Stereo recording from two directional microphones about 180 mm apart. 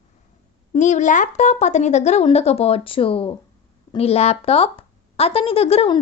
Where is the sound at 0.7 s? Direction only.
40° left (ahead or behind).